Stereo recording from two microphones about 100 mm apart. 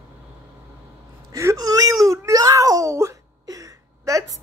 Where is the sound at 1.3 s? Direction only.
25° right (ahead or behind).